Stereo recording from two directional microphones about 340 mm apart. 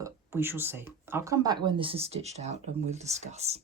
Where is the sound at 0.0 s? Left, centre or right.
Centre.